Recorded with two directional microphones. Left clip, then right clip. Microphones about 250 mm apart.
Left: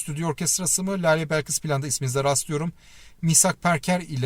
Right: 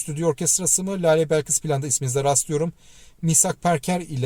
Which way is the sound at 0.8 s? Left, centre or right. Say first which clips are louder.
Right 3 dB; left.